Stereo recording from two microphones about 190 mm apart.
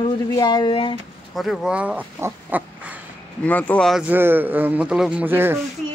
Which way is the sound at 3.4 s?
10° left (ahead or behind).